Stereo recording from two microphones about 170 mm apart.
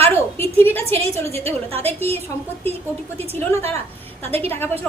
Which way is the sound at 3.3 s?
15° left (ahead or behind).